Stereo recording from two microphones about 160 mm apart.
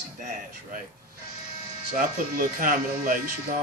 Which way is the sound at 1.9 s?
60° right (ahead or behind).